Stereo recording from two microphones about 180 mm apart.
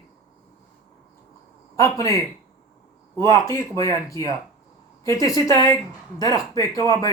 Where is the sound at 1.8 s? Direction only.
15° left (ahead or behind).